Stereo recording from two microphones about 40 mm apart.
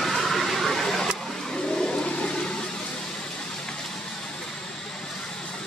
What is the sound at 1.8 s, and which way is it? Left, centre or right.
Toilet flush, left.